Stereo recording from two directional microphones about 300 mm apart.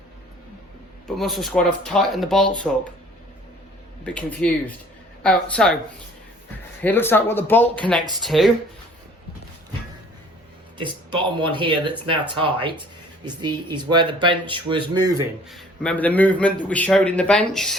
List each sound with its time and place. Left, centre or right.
1.1 s a man's voice: centre
4.0 s a man's voice: centre
6.8 s a man's voice: centre
10.8 s speech: centre
15.4 s a man's voice: centre